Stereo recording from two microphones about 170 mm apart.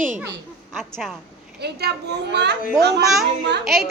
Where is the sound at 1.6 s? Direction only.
75° right (ahead or behind).